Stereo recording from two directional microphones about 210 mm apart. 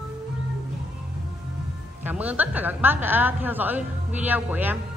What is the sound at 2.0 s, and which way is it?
A woman's voice, 5° right (ahead or behind).